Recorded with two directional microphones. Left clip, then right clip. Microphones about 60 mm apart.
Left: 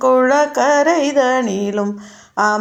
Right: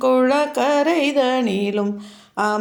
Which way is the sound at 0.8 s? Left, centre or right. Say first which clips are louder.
Left 4 dB; right.